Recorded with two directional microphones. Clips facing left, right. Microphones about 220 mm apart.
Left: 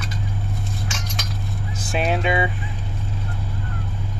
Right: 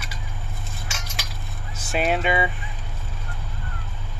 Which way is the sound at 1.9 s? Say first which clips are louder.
Left 1 dB; centre (ahead or behind).